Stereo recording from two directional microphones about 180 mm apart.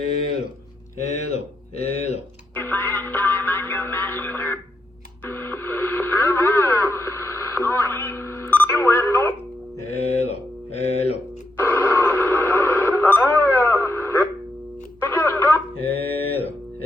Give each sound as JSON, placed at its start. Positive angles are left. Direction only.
{"t": 1.8, "sound": "speech", "side_deg": 35}
{"t": 2.6, "sound": "music", "side_deg": 10}
{"t": 5.2, "sound": "radio", "side_deg": 10}
{"t": 9.9, "sound": "mantra", "side_deg": 35}
{"t": 11.6, "sound": "radio", "side_deg": 10}
{"t": 15.0, "sound": "music", "side_deg": 10}
{"t": 15.8, "sound": "mantra", "side_deg": 30}